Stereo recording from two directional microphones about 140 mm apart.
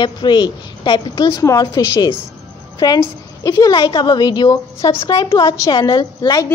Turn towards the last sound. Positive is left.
turn(degrees=25)  # may be behind; listen again after turning